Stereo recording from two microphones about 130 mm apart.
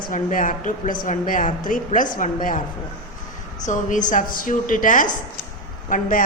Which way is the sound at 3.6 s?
80° left.